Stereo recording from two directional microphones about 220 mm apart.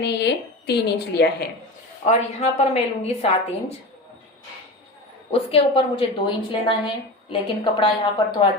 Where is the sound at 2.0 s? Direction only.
30° left (ahead or behind).